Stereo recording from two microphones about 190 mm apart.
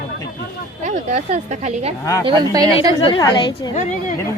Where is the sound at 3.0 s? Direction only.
25° left (ahead or behind).